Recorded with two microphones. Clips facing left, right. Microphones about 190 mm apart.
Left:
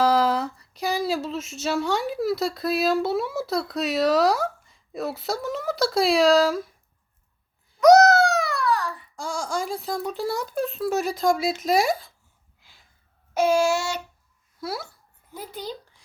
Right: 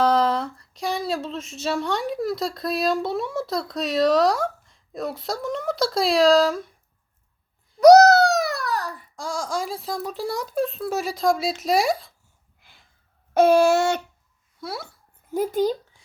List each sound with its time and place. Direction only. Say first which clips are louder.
0.0 s speech: even; 5° left (ahead or behind)
7.8 s a sound: right 3 dB; 35° right (ahead or behind)
9.1 s speech: right 1 dB; centre (ahead or behind)
13.3 s a sound: right 5 dB; 60° right (ahead or behind)
14.6 s speech: left 1 dB; centre (ahead or behind)
15.3 s speech: right 13 dB; 45° right (ahead or behind)